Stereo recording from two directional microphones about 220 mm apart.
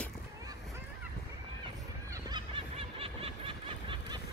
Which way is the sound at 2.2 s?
20° right (ahead or behind).